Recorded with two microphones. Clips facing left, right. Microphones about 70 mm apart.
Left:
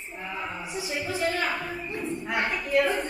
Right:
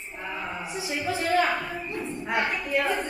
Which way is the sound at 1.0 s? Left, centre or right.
Right.